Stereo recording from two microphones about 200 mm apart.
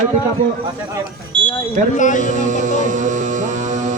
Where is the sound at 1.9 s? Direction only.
40° left (ahead or behind).